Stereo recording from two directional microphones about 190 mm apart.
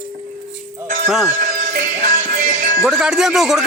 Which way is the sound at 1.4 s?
40° right (ahead or behind).